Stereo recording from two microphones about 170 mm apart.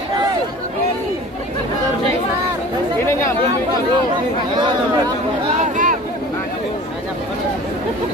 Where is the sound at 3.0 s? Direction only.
15° left (ahead or behind).